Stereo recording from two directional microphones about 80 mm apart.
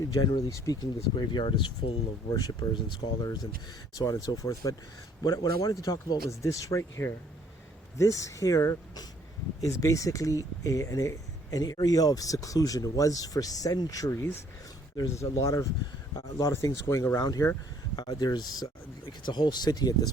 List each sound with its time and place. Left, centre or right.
0.1 s speech: left
0.5 s speech: left
1.1 s speech: left
2.3 s speech: left
19.2 s speech: left